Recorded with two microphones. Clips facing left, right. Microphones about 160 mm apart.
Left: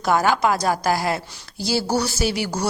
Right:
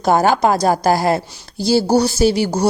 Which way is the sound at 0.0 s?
35° right (ahead or behind).